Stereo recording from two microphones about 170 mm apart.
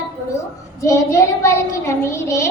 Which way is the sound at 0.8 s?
15° left (ahead or behind).